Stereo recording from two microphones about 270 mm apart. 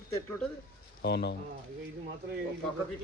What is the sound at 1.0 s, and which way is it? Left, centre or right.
Speech, left.